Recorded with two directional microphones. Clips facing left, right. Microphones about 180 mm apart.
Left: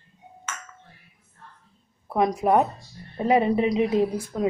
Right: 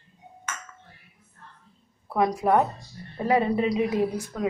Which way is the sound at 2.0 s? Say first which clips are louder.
Left 1 dB; 20° left (ahead or behind).